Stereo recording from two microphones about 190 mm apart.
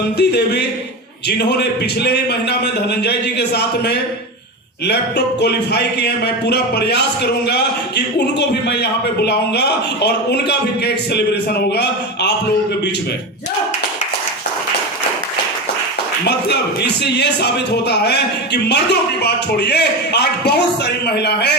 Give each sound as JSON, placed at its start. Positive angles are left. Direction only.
{"t": 0.2, "sound": "speech", "side_deg": 60}
{"t": 16.2, "sound": "speech", "side_deg": 60}